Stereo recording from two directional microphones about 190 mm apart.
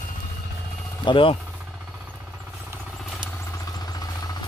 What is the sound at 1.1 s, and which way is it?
Speech, 25° left (ahead or behind).